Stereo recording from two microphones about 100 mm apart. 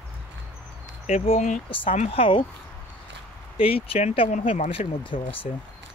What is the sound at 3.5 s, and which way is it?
Speech, 65° left (ahead or behind).